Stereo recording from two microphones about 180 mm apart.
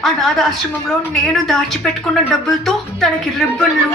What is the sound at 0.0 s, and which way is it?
A woman's voice, centre (ahead or behind).